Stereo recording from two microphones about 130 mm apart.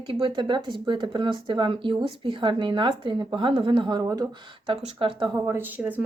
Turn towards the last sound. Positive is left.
turn(degrees=-10)  # may be behind; listen again after turning